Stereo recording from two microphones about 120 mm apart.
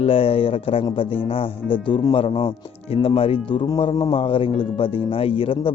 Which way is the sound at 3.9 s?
35° left (ahead or behind).